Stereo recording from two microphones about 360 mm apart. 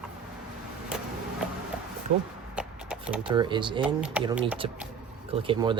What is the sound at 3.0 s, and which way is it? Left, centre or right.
Speech, centre.